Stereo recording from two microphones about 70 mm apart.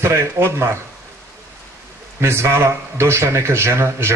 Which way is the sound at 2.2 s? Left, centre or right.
Right.